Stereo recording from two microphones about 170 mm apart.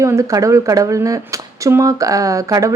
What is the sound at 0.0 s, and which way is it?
Speech, 15° right (ahead or behind).